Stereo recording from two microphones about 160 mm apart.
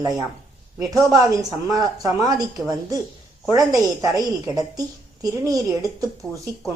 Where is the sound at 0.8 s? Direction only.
20° right (ahead or behind).